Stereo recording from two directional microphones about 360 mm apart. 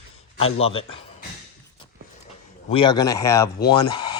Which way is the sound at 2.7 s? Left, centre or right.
Centre.